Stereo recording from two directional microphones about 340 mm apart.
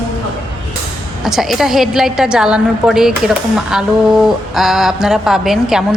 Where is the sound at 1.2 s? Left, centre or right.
Centre.